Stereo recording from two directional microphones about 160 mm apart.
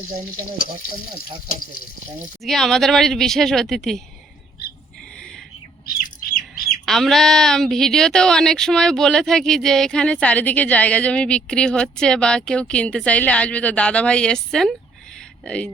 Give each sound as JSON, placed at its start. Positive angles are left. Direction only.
{"t": 2.4, "sound": "a woman's voice", "side_deg": 0}
{"t": 5.8, "sound": "bird", "side_deg": 65}
{"t": 6.8, "sound": "a woman's voice", "side_deg": 0}